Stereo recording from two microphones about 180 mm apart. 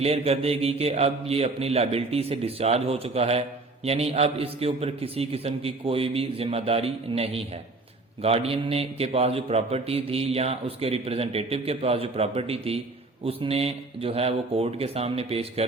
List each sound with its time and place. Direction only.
0.0 s a man's voice: 35° right (ahead or behind)